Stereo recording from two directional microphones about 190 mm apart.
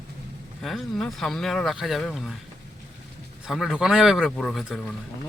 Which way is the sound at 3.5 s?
Centre (ahead or behind).